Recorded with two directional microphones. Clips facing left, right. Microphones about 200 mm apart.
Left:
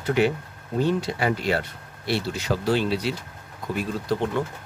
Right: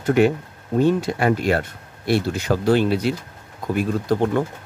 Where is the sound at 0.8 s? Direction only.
50° right (ahead or behind).